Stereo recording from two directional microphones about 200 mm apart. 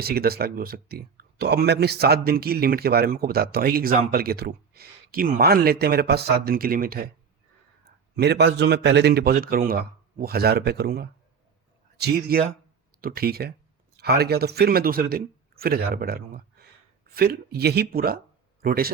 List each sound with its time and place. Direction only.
0.0 s speech: 50° right (ahead or behind)